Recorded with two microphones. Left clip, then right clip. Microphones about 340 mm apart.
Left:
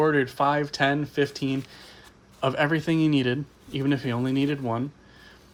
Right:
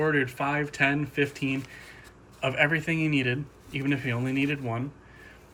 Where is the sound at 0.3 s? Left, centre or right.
Centre.